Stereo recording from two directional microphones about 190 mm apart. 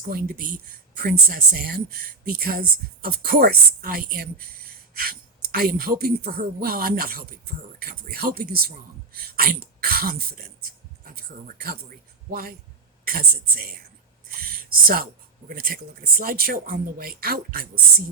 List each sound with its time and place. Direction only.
0.0 s speech: 50° right (ahead or behind)
14.3 s a sound: 50° right (ahead or behind)
15.4 s speech: 50° right (ahead or behind)